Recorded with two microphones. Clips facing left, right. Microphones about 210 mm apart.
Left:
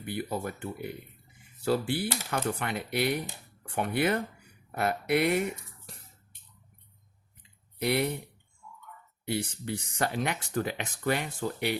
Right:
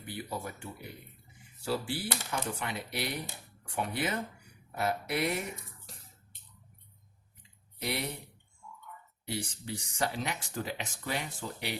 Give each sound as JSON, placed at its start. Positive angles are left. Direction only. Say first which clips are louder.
{"t": 0.0, "sound": "speech", "louder": "left 6 dB", "side_deg": 60}
{"t": 7.8, "sound": "speech", "louder": "left 8 dB", "side_deg": 60}
{"t": 9.2, "sound": "speech", "louder": "left 6 dB", "side_deg": 60}